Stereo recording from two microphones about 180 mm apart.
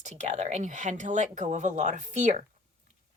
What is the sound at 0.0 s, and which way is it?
Speech, 40° right (ahead or behind).